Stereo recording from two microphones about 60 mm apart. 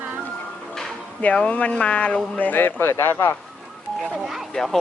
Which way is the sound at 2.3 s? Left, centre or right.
Left.